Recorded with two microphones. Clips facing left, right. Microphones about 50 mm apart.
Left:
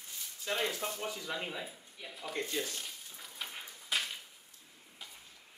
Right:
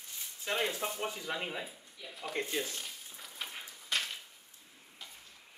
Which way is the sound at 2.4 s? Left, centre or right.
Centre.